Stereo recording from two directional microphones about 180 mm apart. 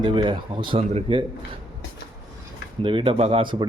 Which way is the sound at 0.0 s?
25° right (ahead or behind).